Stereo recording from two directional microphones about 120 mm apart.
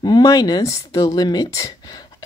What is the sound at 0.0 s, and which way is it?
Speech, 35° left (ahead or behind).